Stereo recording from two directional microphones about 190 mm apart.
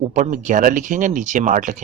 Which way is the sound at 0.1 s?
40° right (ahead or behind).